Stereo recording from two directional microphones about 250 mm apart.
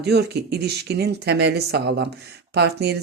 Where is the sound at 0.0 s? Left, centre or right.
Right.